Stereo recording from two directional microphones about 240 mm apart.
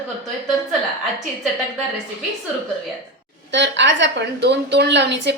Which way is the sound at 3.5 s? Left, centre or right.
Right.